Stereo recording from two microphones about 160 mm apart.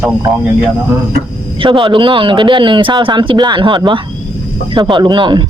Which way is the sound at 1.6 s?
30° right (ahead or behind).